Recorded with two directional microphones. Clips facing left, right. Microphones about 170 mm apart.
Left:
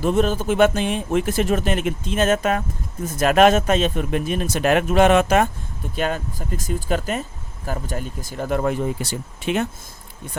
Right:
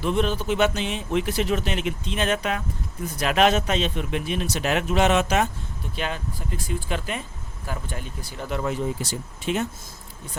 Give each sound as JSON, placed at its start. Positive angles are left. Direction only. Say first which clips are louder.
{"t": 0.0, "sound": "speech", "louder": "left 4 dB", "side_deg": 45}